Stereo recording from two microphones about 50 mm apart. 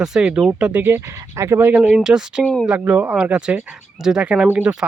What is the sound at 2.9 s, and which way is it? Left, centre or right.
Speech, right.